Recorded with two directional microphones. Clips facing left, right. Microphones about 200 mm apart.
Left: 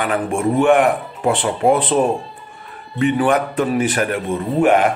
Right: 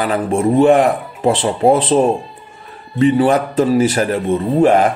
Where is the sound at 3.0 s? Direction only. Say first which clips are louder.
Right 4 dB; 30° right (ahead or behind).